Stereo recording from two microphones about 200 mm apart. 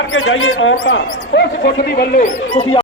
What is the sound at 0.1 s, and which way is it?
Speech, 80° left.